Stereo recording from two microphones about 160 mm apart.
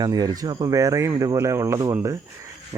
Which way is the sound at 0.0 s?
25° right (ahead or behind).